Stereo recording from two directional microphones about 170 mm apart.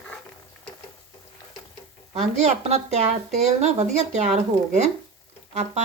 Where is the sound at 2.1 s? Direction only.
40° right (ahead or behind).